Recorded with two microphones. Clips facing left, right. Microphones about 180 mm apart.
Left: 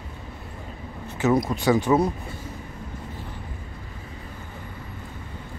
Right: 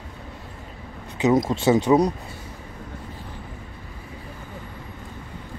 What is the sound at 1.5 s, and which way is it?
Speech, 25° right (ahead or behind).